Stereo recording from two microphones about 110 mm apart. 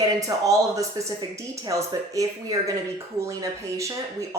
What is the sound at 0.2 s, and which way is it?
Speech, 30° right (ahead or behind).